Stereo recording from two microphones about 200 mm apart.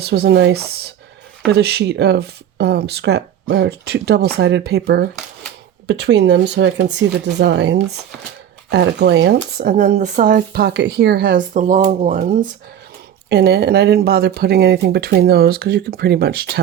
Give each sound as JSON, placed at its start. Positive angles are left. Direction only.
{"t": 0.0, "sound": "speech", "side_deg": -55}
{"t": 13.3, "sound": "speech", "side_deg": -55}